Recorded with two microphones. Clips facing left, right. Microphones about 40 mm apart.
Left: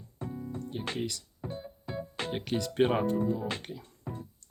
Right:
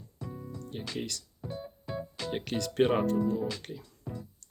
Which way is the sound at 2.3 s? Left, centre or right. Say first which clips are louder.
Even; centre.